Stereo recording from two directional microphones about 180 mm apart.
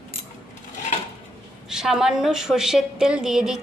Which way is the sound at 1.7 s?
5° right (ahead or behind).